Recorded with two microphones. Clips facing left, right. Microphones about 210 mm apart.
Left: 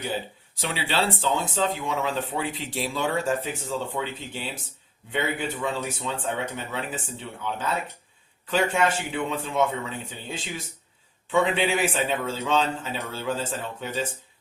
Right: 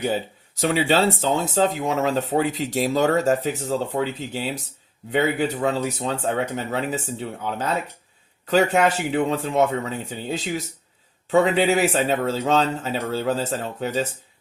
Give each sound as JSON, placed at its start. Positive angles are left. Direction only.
{"t": 0.0, "sound": "speech", "side_deg": -45}